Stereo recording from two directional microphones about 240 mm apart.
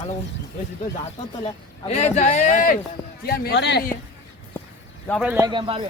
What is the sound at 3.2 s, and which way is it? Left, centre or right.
Speech, left.